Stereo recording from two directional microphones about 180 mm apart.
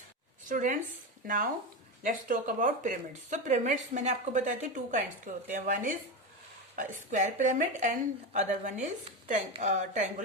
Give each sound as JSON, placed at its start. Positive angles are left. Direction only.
{"t": 0.4, "sound": "speech", "side_deg": -45}